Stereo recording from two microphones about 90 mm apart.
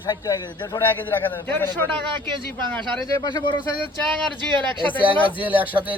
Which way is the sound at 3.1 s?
45° left (ahead or behind).